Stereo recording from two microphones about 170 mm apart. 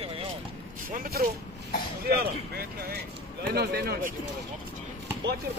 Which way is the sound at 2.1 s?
65° right (ahead or behind).